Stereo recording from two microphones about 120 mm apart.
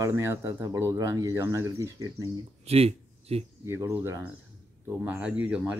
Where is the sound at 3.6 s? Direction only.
25° right (ahead or behind).